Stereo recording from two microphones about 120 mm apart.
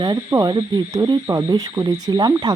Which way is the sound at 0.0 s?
35° right (ahead or behind).